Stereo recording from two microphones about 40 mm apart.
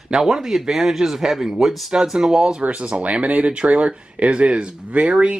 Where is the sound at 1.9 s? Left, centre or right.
Centre.